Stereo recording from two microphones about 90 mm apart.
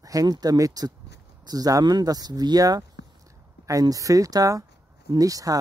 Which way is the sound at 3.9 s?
40° right (ahead or behind).